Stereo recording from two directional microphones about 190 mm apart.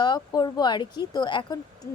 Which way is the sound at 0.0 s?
20° left (ahead or behind).